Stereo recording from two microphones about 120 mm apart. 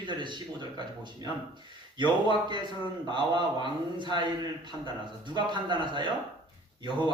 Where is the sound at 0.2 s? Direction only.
40° right (ahead or behind).